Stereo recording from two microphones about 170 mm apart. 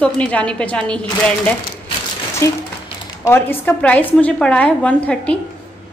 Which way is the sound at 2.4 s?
15° left (ahead or behind).